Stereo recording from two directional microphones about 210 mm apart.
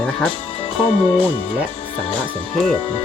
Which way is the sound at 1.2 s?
25° left (ahead or behind).